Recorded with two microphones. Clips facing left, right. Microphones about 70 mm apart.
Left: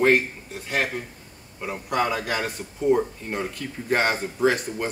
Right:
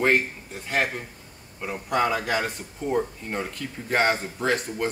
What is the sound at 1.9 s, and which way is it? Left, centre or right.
Speech, centre.